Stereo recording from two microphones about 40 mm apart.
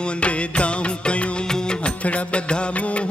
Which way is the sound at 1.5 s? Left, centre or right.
Left.